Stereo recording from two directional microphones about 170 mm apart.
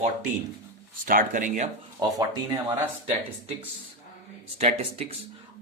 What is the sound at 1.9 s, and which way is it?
Speech, 25° right (ahead or behind).